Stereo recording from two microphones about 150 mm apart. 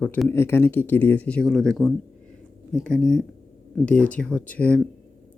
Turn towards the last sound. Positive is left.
turn(degrees=10)  # may be behind; listen again after turning